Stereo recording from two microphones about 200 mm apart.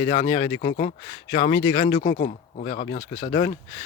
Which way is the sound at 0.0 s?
25° left (ahead or behind).